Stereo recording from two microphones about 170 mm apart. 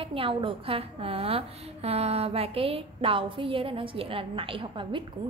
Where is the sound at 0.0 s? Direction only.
30° right (ahead or behind).